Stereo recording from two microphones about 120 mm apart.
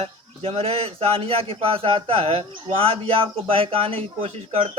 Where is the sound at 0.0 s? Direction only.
60° right (ahead or behind).